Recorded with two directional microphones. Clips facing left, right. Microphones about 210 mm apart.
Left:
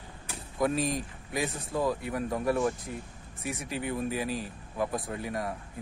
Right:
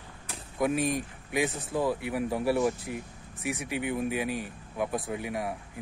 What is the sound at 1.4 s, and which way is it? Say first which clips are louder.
Speech: right 1 dB; centre (ahead or behind).